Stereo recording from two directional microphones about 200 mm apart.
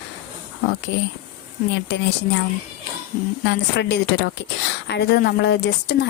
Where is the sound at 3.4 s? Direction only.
55° left (ahead or behind).